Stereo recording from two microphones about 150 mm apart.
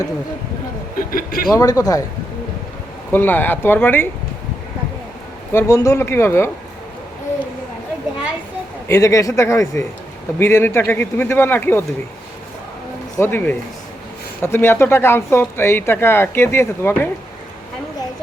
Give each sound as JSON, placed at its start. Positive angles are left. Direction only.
{"t": 0.9, "sound": "speech", "side_deg": 75}
{"t": 1.5, "sound": "a man's voice", "side_deg": 25}
{"t": 3.1, "sound": "speech", "side_deg": 15}
{"t": 5.5, "sound": "speech", "side_deg": 20}
{"t": 8.9, "sound": "a man's voice", "side_deg": 20}
{"t": 13.1, "sound": "speech", "side_deg": 15}